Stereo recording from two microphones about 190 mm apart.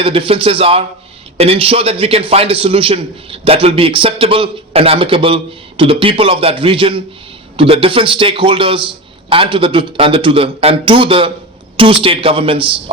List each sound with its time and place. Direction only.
0.0 s a man's voice: 30° right (ahead or behind)